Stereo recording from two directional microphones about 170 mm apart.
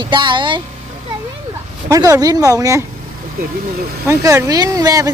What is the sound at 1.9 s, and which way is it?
Speech, 20° right (ahead or behind).